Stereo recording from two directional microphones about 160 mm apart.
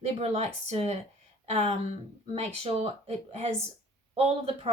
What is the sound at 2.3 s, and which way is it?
A woman's voice, 40° right (ahead or behind).